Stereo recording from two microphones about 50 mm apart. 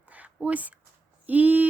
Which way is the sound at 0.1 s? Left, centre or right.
Right.